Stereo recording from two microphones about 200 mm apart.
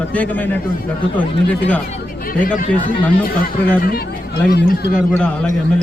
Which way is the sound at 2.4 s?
40° left (ahead or behind).